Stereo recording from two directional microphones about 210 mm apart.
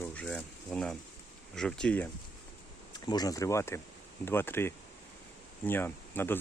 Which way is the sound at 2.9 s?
20° left (ahead or behind).